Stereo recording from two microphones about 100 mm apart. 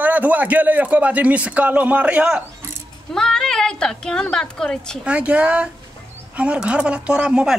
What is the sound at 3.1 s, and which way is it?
A woman's voice, 5° left (ahead or behind).